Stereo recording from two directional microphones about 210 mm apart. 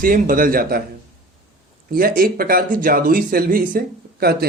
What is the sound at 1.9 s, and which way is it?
Speech, 45° right (ahead or behind).